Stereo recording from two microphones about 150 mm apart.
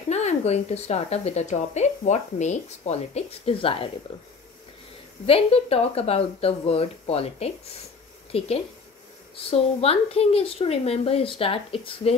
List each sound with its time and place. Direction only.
0.1 s speech: 50° left (ahead or behind)
5.2 s speech: 40° left (ahead or behind)